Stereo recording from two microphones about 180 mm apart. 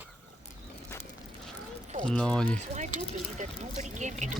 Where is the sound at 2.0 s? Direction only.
5° left (ahead or behind).